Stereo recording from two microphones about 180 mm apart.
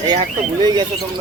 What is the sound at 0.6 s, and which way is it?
Speech, 25° right (ahead or behind).